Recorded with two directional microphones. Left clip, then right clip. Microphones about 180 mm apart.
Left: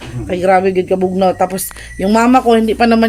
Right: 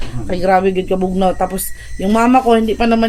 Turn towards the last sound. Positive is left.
turn(degrees=20)  # may be behind; listen again after turning